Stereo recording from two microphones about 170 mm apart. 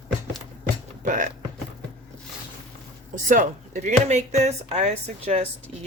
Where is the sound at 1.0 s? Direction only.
50° right (ahead or behind).